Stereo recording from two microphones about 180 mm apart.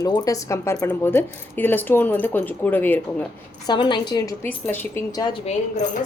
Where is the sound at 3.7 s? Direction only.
25° left (ahead or behind).